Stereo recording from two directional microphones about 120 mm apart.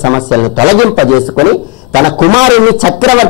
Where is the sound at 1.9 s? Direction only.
5° right (ahead or behind).